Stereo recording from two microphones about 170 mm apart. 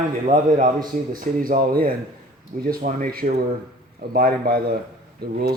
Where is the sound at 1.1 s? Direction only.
55° right (ahead or behind).